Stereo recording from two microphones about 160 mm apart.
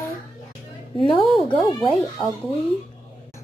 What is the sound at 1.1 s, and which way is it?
Speech, 30° left (ahead or behind).